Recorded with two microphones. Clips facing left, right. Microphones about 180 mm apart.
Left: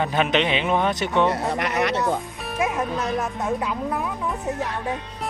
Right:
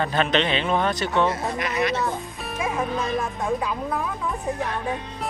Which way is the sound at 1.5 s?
65° left (ahead or behind).